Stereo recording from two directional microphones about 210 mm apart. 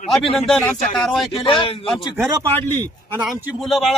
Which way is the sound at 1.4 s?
25° left (ahead or behind).